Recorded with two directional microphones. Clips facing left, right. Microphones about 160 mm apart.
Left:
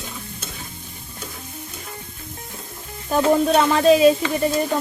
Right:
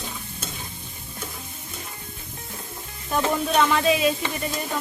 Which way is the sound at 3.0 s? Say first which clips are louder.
Left 7 dB; 35° left (ahead or behind).